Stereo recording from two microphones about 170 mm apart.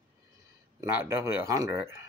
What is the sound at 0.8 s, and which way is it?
Speech, 15° right (ahead or behind).